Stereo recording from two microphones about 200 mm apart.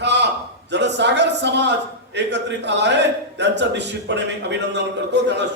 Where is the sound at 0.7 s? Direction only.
60° right (ahead or behind).